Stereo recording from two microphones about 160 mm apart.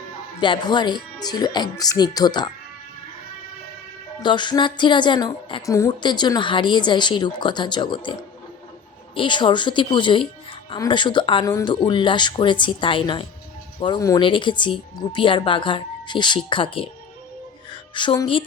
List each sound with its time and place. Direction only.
0.3 s speech: 30° left (ahead or behind)
4.2 s speech: 30° left (ahead or behind)
9.1 s a woman's voice: 30° left (ahead or behind)